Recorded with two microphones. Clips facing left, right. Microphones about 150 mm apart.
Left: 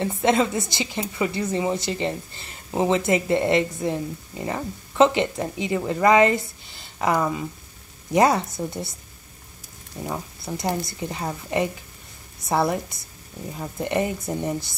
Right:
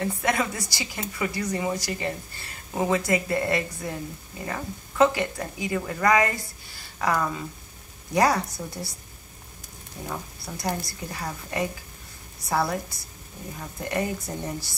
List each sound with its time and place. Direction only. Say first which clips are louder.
0.0 s a woman's voice: left 5 dB; 25° left (ahead or behind)
10.0 s a woman's voice: left 4 dB; 20° left (ahead or behind)